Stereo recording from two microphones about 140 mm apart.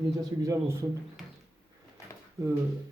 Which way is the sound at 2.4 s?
25° right (ahead or behind).